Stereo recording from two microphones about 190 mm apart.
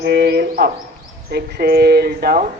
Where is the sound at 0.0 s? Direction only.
60° right (ahead or behind).